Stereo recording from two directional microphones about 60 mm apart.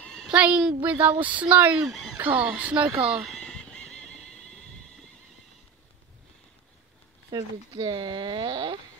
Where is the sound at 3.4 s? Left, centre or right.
Centre.